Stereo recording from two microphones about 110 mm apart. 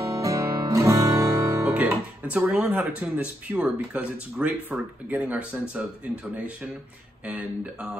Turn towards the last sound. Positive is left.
turn(degrees=-15)  # may be behind; listen again after turning